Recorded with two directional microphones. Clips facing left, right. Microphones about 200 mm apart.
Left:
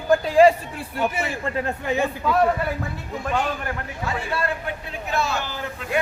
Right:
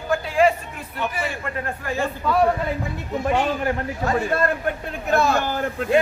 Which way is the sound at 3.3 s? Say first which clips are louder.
Right 3 dB; 25° right (ahead or behind).